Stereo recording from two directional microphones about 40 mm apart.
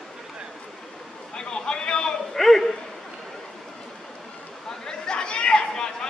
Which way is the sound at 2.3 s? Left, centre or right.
Centre.